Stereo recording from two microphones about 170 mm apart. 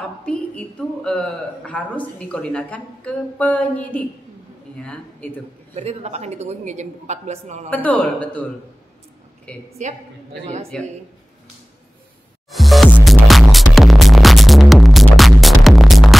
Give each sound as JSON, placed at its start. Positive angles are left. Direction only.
{"t": 0.2, "sound": "speech", "side_deg": 5}
{"t": 5.8, "sound": "a woman's voice", "side_deg": -40}
{"t": 7.7, "sound": "speech", "side_deg": 10}
{"t": 9.5, "sound": "a woman's voice", "side_deg": 5}
{"t": 10.7, "sound": "a woman's voice", "side_deg": 5}
{"t": 12.4, "sound": "music", "side_deg": 0}